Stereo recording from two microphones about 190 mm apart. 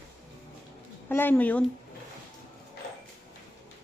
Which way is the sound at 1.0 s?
10° left (ahead or behind).